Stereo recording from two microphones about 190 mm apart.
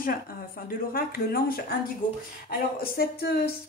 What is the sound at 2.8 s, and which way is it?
Speech, 50° left (ahead or behind).